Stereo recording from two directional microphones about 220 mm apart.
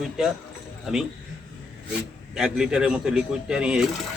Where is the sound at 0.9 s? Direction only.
5° right (ahead or behind).